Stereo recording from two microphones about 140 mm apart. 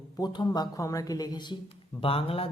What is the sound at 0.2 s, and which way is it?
Speech, 30° left (ahead or behind).